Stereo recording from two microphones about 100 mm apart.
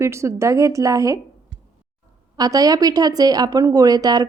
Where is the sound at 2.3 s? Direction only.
40° right (ahead or behind).